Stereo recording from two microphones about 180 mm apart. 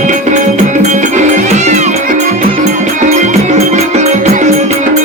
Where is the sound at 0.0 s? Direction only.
45° right (ahead or behind).